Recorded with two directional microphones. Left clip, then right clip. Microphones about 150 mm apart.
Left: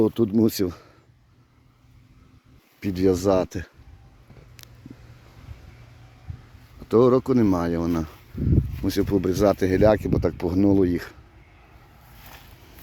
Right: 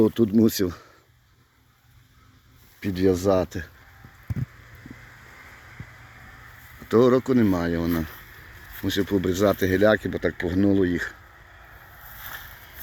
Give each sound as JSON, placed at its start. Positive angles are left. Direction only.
{"t": 0.0, "sound": "speech", "side_deg": 20}
{"t": 2.8, "sound": "speech", "side_deg": 35}
{"t": 6.8, "sound": "speech", "side_deg": 35}
{"t": 12.2, "sound": "boat", "side_deg": 5}